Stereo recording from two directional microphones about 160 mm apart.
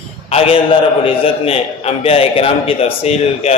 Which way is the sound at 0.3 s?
35° left (ahead or behind).